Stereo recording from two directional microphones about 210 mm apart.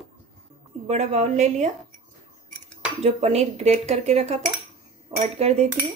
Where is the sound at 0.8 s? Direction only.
30° right (ahead or behind).